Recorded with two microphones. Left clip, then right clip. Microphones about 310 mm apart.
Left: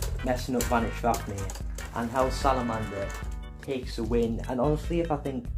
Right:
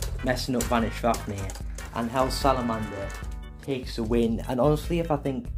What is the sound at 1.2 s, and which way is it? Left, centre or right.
Speech, centre.